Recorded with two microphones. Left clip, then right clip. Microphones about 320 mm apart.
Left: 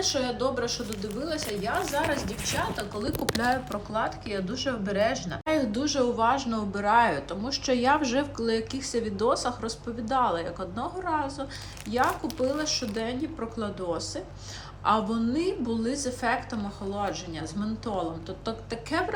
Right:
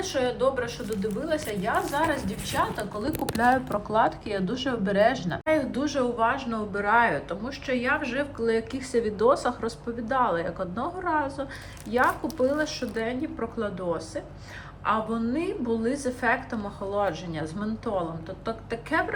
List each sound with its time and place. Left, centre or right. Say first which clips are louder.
0.6 s a woman's voice: right 1 dB; centre